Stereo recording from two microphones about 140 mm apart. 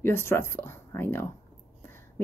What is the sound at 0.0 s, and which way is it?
Speech, 15° left (ahead or behind).